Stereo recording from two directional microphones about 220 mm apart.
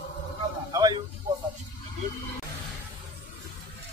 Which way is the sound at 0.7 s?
15° right (ahead or behind).